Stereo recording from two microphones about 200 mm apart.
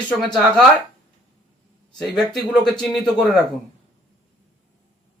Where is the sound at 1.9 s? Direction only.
Centre (ahead or behind).